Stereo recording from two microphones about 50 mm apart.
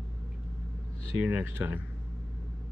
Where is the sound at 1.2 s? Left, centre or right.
Right.